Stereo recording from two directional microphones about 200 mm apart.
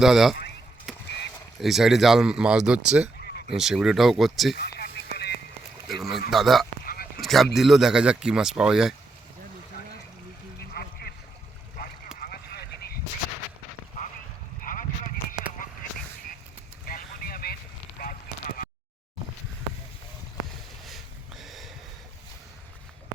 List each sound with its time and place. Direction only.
0.0 s speech: centre (ahead or behind)
0.9 s honk: centre (ahead or behind)
1.6 s speech: centre (ahead or behind)
4.8 s radio: 55° left (ahead or behind)
5.9 s speech: centre (ahead or behind)
6.8 s honk: 45° left (ahead or behind)
7.2 s speech: centre (ahead or behind)
12.2 s a sound: 50° left (ahead or behind)
14.6 s a sound: 40° left (ahead or behind)
16.8 s vehicle: 45° left (ahead or behind)
18.0 s a sound: 45° left (ahead or behind)
20.8 s a sound: centre (ahead or behind)